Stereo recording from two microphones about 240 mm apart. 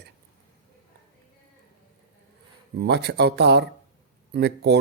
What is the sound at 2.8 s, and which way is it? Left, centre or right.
Speech, right.